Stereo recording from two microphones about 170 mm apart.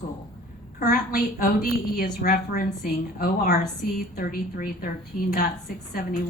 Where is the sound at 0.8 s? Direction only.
60° left (ahead or behind).